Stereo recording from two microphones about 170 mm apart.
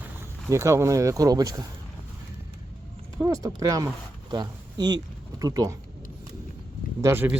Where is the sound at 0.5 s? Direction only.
15° right (ahead or behind).